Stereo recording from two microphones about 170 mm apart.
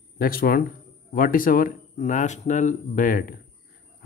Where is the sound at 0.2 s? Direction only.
60° left (ahead or behind).